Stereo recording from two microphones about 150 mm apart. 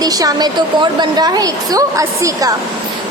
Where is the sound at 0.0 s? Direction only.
25° right (ahead or behind).